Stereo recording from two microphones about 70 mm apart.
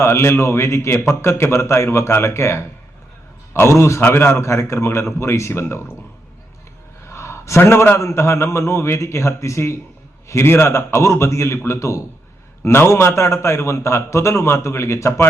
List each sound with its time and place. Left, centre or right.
0.0 s a man's voice: left
7.1 s a sound: left
7.9 s a man's voice: left